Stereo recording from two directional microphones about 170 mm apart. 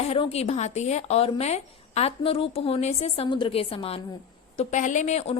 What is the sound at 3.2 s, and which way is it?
A woman's voice, 30° left (ahead or behind).